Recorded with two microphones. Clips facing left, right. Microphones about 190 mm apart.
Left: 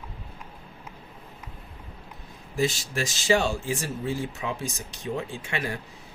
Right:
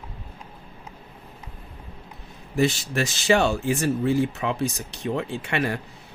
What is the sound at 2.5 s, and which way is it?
Speech, 65° right (ahead or behind).